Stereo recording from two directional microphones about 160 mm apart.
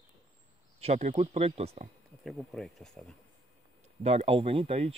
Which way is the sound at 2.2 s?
Centre (ahead or behind).